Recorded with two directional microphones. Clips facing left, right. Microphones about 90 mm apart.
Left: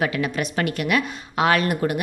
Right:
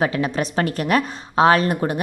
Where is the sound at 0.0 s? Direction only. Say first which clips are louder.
Right 3 dB; 30° right (ahead or behind).